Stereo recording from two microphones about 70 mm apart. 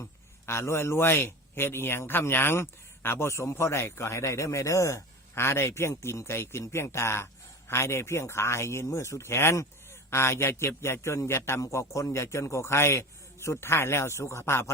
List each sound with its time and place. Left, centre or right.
0.0 s a man's voice: left